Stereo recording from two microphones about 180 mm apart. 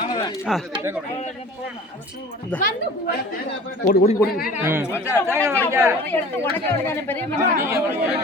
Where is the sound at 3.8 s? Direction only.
40° left (ahead or behind).